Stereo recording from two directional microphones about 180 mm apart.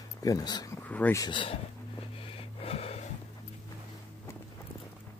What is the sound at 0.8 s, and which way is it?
Speech, 10° left (ahead or behind).